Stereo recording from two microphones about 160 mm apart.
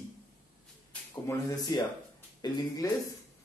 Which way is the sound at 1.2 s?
25° left (ahead or behind).